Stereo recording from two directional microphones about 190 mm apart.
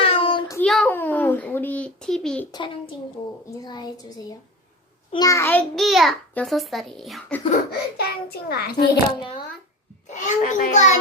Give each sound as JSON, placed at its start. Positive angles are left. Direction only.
{"t": 0.0, "sound": "child singing", "side_deg": 30}
{"t": 0.6, "sound": "a sound", "side_deg": 5}
{"t": 2.5, "sound": "a child's voice", "side_deg": 25}
{"t": 7.7, "sound": "a child's voice", "side_deg": 55}
{"t": 10.1, "sound": "a child's voice", "side_deg": 40}